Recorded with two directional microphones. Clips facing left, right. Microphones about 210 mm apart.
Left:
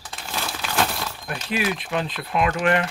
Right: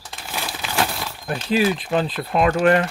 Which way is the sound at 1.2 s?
30° right (ahead or behind).